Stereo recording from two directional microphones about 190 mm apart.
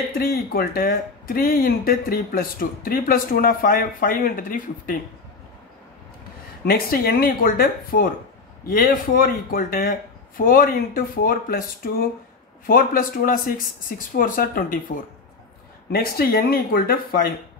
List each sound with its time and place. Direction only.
0.1 s speech: 50° left (ahead or behind)
6.6 s speech: 50° left (ahead or behind)